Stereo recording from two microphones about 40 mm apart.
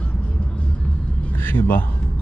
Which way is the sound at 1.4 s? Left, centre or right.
Left.